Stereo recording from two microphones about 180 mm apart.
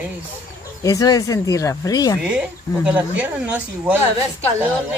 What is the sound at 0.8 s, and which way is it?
Speech, 20° left (ahead or behind).